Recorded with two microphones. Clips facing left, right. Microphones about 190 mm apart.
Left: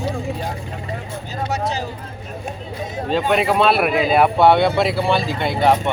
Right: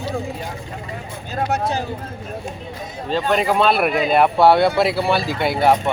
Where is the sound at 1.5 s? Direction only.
55° right (ahead or behind).